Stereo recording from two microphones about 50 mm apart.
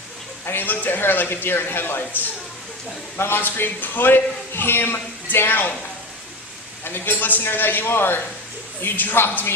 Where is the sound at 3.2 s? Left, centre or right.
Left.